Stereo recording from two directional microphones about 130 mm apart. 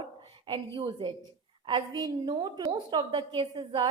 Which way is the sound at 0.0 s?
40° right (ahead or behind).